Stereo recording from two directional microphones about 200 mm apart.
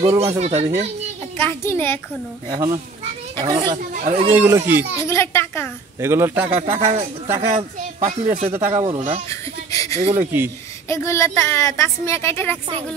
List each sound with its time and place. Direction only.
0.2 s speech: 30° right (ahead or behind)
1.4 s speech: 10° left (ahead or behind)
2.5 s a man's voice: 20° right (ahead or behind)
3.7 s speech: 35° right (ahead or behind)
4.4 s a man's voice: 10° right (ahead or behind)
5.0 s speech: 15° left (ahead or behind)
5.9 s a man's voice: 15° right (ahead or behind)
6.6 s speech: 35° right (ahead or behind)
8.5 s a man's voice: 10° right (ahead or behind)
8.8 s speech: 35° right (ahead or behind)
9.3 s giggle: 15° left (ahead or behind)
9.9 s speech: 30° right (ahead or behind)
10.9 s speech: 15° left (ahead or behind)